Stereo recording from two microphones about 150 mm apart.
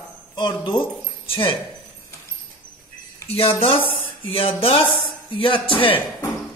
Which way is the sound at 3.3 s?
40° left (ahead or behind).